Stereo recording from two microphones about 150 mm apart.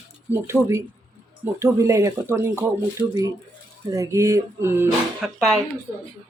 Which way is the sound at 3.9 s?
20° right (ahead or behind).